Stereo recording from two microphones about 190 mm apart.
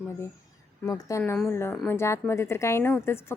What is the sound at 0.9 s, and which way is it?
A woman's voice, 15° left (ahead or behind).